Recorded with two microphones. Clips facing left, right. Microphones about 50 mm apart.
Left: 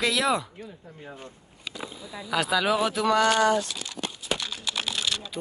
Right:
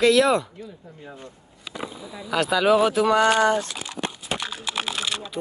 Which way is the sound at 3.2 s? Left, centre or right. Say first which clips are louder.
Even; right.